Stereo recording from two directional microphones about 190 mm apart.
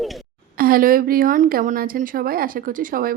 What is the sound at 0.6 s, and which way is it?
A woman's voice, 50° right (ahead or behind).